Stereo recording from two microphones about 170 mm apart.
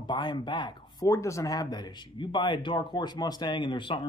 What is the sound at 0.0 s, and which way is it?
Speech, 25° left (ahead or behind).